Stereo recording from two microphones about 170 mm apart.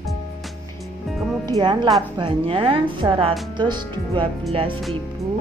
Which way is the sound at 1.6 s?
30° right (ahead or behind).